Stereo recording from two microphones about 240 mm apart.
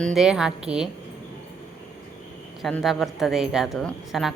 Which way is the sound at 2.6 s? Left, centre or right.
Centre.